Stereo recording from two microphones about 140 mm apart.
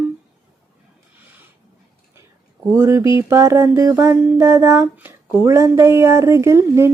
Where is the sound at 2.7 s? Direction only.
20° right (ahead or behind).